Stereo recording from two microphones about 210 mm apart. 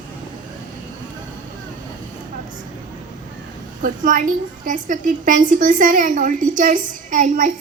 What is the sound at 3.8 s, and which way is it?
A woman's voice, 40° right (ahead or behind).